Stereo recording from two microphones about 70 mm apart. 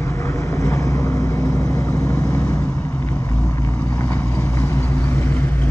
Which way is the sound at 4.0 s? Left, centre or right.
Left.